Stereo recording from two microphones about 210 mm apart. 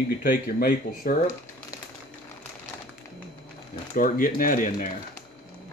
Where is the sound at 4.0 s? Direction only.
40° left (ahead or behind).